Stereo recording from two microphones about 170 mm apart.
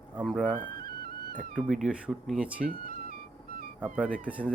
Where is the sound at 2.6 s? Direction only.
55° right (ahead or behind).